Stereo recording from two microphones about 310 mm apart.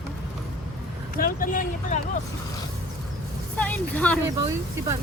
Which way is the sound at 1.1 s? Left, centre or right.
Left.